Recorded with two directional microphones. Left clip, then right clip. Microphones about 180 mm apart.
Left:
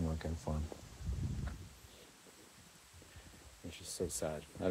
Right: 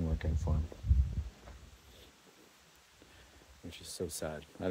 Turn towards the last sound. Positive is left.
turn(degrees=-35)  # may be behind; listen again after turning